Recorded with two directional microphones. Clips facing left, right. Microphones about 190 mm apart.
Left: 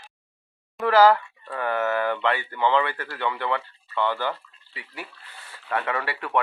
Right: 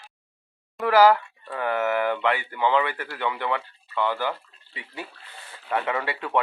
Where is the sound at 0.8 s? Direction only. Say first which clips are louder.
Even; 15° right (ahead or behind).